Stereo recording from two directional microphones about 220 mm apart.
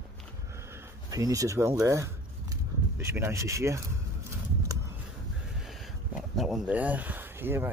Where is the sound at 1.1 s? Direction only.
15° right (ahead or behind).